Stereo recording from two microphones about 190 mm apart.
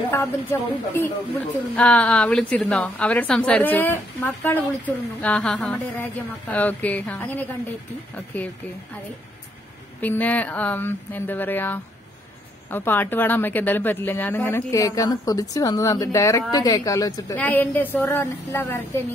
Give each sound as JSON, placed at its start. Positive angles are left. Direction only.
{"t": 0.1, "sound": "a woman's voice", "side_deg": 15}
{"t": 10.0, "sound": "a woman's voice", "side_deg": 10}